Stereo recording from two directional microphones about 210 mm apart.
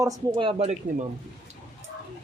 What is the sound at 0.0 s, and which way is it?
Speech, 20° right (ahead or behind).